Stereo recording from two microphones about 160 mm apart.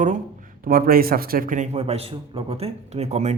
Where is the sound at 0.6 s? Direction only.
65° right (ahead or behind).